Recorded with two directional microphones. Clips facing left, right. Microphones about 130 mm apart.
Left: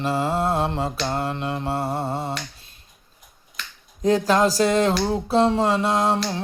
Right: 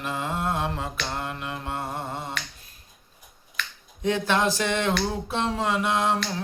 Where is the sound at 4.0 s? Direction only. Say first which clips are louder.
Left 5 dB; 35° left (ahead or behind).